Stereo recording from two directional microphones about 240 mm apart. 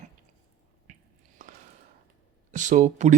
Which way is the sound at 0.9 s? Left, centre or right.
Right.